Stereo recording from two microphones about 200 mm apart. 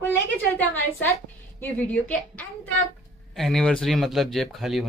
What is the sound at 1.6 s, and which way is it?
A woman's voice, 5° left (ahead or behind).